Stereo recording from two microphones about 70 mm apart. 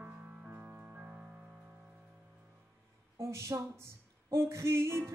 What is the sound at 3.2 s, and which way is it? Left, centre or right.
Female singing, right.